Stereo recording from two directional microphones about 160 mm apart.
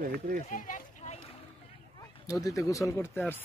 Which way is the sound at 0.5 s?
55° left (ahead or behind).